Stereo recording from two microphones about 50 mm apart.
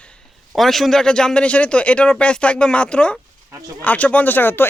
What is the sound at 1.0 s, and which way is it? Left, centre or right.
Speech, centre.